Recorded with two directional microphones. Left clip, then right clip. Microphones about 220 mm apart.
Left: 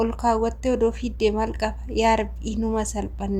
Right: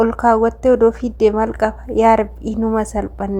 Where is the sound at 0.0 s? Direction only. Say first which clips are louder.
Right 8 dB; 30° right (ahead or behind).